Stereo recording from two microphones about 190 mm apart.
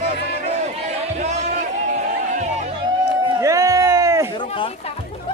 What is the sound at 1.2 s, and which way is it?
Music, 35° right (ahead or behind).